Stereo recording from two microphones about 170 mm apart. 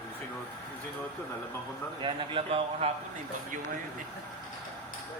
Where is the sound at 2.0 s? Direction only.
30° right (ahead or behind).